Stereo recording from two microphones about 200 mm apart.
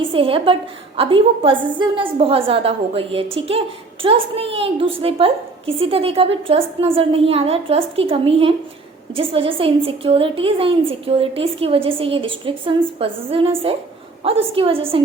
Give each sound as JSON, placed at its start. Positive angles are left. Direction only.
{"t": 0.0, "sound": "a woman's voice", "side_deg": -25}